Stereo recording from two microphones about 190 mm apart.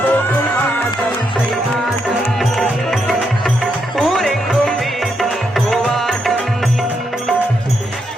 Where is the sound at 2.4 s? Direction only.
Centre (ahead or behind).